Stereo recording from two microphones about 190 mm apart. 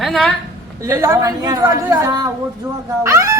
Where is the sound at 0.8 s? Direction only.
15° right (ahead or behind).